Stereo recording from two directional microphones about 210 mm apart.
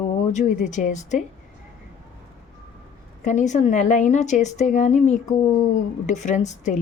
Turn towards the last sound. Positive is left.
turn(degrees=35)  # may be behind; listen again after turning